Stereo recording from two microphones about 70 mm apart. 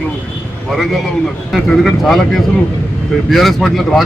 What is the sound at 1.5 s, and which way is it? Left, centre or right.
Speech, centre.